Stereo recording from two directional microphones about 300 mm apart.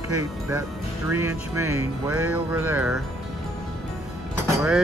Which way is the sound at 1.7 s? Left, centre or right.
Right.